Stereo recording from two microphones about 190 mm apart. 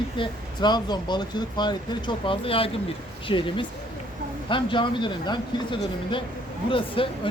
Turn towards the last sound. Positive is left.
turn(degrees=25)  # may be behind; listen again after turning